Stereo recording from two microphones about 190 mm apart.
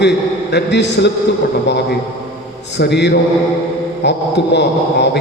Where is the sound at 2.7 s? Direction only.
65° left (ahead or behind).